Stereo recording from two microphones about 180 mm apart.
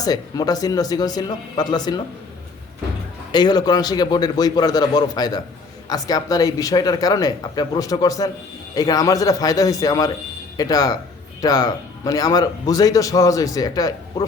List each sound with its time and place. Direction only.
0.0 s a man's voice: 20° left (ahead or behind)
3.3 s a man's voice: 25° left (ahead or behind)